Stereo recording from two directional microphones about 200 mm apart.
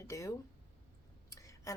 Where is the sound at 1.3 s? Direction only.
15° left (ahead or behind).